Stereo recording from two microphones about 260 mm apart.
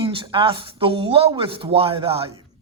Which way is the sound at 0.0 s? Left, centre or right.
Centre.